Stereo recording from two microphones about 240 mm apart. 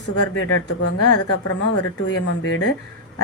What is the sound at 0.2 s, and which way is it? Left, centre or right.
A woman's voice, left.